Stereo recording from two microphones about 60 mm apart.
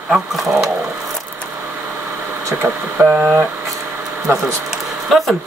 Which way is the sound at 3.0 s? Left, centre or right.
Right.